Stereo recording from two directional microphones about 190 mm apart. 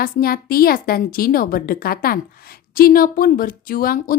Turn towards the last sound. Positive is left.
turn(degrees=50)  # may be behind; listen again after turning